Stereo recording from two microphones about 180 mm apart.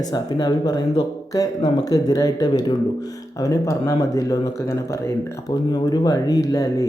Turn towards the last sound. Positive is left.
turn(degrees=20)  # may be behind; listen again after turning